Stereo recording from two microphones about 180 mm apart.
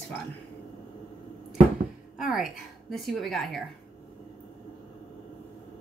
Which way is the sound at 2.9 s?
Centre (ahead or behind).